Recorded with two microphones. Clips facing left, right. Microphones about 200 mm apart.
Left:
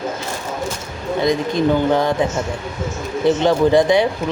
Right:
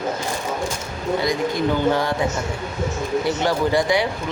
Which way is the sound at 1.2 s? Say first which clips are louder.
Left 6 dB; 20° left (ahead or behind).